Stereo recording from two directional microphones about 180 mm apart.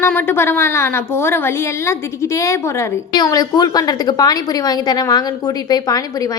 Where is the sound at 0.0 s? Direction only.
10° left (ahead or behind).